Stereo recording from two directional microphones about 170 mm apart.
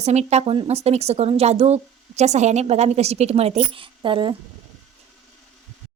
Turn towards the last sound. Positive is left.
turn(degrees=-30)  # may be behind; listen again after turning